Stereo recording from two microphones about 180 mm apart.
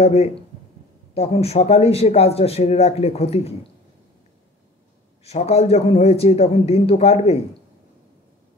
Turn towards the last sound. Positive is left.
turn(degrees=35)  # may be behind; listen again after turning